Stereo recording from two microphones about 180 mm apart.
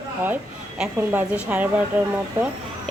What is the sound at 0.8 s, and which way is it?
A woman's voice, 10° right (ahead or behind).